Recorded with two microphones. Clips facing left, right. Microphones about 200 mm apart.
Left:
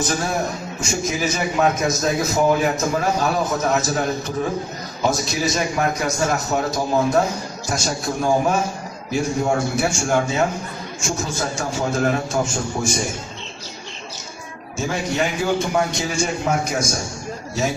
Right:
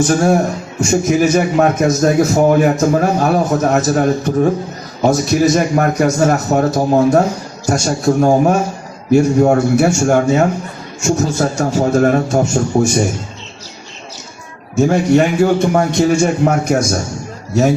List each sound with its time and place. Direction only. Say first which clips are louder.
0.1 s a man's voice: right 10 dB; 45° right (ahead or behind)
14.8 s a man's voice: right 11 dB; 55° right (ahead or behind)